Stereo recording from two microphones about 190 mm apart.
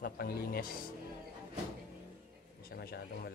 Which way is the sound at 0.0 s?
50° left (ahead or behind).